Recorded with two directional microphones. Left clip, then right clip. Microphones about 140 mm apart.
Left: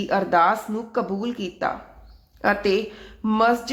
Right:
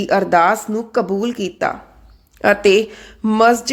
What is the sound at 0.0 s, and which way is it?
A woman's voice, 60° right (ahead or behind).